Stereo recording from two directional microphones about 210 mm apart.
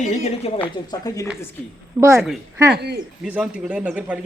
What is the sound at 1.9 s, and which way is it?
Speech, 10° right (ahead or behind).